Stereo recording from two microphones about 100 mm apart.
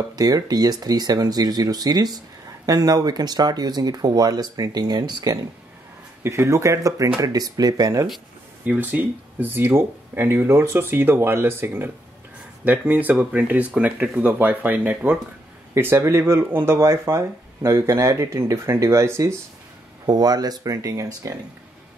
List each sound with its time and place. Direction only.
0.1 s speech: 40° right (ahead or behind)
6.2 s speech: 25° right (ahead or behind)
8.6 s speech: 15° right (ahead or behind)
20.1 s speech: 40° right (ahead or behind)